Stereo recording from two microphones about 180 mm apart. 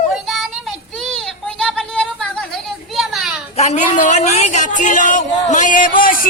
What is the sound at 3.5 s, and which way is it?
Speech, 40° left (ahead or behind).